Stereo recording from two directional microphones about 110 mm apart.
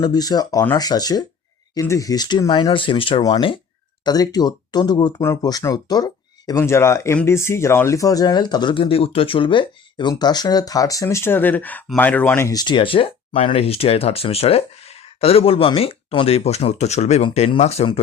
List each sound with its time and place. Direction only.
0.0 s speech: 35° left (ahead or behind)
2.5 s speech: 50° left (ahead or behind)
4.0 s speech: 35° left (ahead or behind)
5.2 s speech: 25° left (ahead or behind)
5.5 s speech: 35° left (ahead or behind); by 12.5 s 15° left (ahead or behind)
12.5 s speech: 40° left (ahead or behind); by 17.8 s 75° left (ahead or behind)